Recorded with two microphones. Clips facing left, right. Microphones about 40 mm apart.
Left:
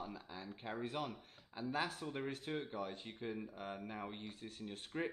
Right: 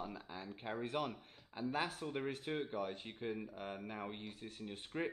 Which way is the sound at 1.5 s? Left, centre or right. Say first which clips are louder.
Right 1 dB; centre.